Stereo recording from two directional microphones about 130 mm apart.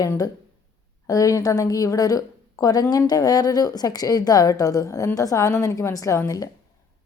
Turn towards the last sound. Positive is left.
turn(degrees=25)  # may be behind; listen again after turning